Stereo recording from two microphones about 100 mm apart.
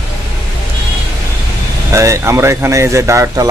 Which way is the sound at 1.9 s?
30° right (ahead or behind).